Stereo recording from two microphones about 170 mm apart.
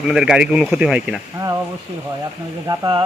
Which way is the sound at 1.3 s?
20° right (ahead or behind).